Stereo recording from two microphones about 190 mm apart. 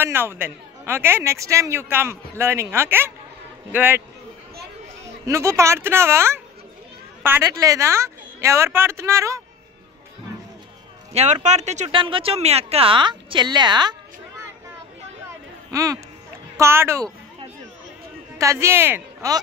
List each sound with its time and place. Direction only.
0.0 s a man's voice: 10° right (ahead or behind)
5.2 s a man's voice: 15° right (ahead or behind)
11.4 s speech: 35° right (ahead or behind)
15.2 s a sound: 15° right (ahead or behind)
16.5 s a man's voice: 15° right (ahead or behind)
18.4 s a man's voice: 15° right (ahead or behind)